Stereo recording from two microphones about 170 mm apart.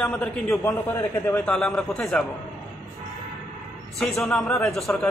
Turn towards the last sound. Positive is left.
turn(degrees=5)  # may be behind; listen again after turning